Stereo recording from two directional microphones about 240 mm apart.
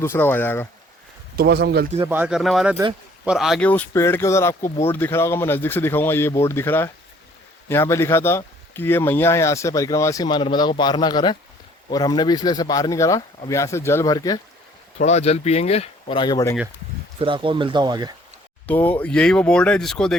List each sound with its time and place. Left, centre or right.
0.0 s speech: centre
1.4 s speech: right
2.0 s speech: centre
14.9 s speech: left
17.2 s speech: right
18.6 s speech: centre